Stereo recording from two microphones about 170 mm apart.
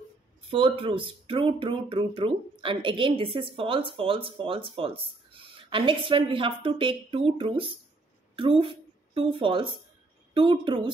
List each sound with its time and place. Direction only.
0.5 s speech: 30° right (ahead or behind)